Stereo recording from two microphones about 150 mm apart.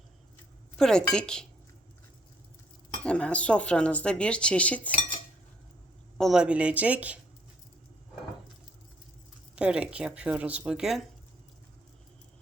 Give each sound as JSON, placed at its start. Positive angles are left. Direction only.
{"t": 0.8, "sound": "a woman's voice", "side_deg": 5}
{"t": 3.0, "sound": "speech", "side_deg": 5}
{"t": 6.1, "sound": "a woman's voice", "side_deg": 0}
{"t": 9.6, "sound": "a woman's voice", "side_deg": -5}